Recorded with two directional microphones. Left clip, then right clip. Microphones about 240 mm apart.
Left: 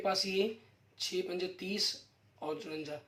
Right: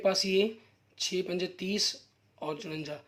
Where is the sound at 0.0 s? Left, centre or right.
Right.